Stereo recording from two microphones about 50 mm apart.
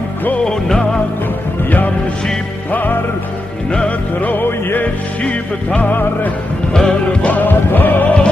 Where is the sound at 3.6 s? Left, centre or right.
Centre.